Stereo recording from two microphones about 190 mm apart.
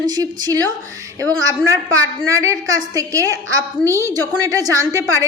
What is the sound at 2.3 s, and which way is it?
A woman's voice, 15° right (ahead or behind).